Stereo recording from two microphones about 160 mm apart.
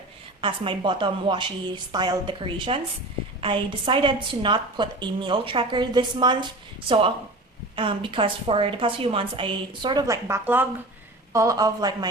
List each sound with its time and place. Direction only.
0.4 s a woman's voice: 30° right (ahead or behind)